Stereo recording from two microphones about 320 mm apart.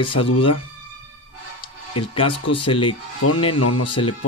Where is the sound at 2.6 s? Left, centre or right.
Centre.